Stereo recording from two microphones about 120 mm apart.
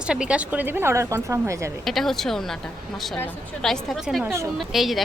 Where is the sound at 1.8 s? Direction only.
Centre (ahead or behind).